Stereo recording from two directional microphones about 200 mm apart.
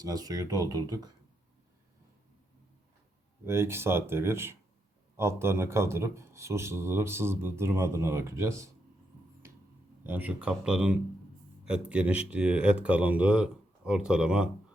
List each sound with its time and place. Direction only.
0.0 s speech: 20° right (ahead or behind)
3.4 s speech: 10° right (ahead or behind)
10.1 s speech: 10° right (ahead or behind)